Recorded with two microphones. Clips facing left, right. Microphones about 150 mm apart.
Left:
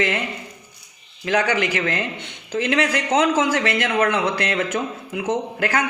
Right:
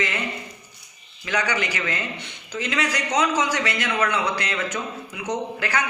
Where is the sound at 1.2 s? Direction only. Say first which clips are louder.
Left 5 dB; 55° left (ahead or behind).